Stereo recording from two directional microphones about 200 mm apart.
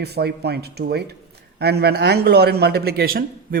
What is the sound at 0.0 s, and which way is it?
Speech, 55° right (ahead or behind).